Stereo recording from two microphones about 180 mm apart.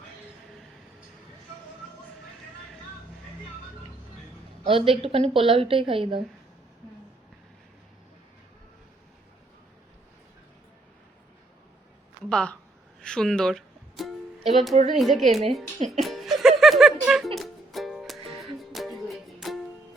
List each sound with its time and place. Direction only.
4.6 s a woman's voice: 35° right (ahead or behind)
12.3 s a woman's voice: 5° left (ahead or behind)
15.9 s music: centre (ahead or behind)